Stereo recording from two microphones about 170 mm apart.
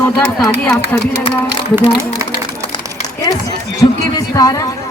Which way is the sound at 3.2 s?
20° left (ahead or behind).